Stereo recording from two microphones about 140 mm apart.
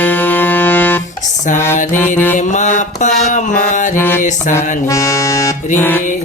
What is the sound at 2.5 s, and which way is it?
Mantra, 60° left (ahead or behind).